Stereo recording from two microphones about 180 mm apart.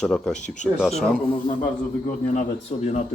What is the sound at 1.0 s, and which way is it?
Speech, centre (ahead or behind).